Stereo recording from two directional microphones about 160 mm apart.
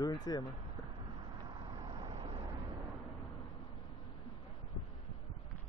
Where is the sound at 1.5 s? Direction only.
30° right (ahead or behind).